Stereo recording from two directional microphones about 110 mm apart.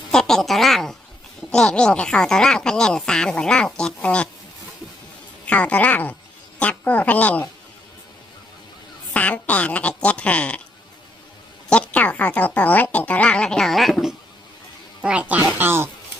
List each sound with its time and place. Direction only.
0.1 s speech: 5° left (ahead or behind)
5.5 s speech: 10° left (ahead or behind)
9.1 s speech: 15° left (ahead or behind)
11.7 s speech: 10° left (ahead or behind)
15.0 s speech: 10° right (ahead or behind)